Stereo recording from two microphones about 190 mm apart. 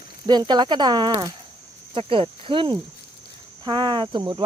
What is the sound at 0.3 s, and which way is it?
Speech, 20° right (ahead or behind).